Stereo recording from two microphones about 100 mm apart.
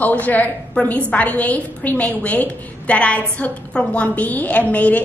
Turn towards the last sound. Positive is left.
turn(degrees=15)  # may be behind; listen again after turning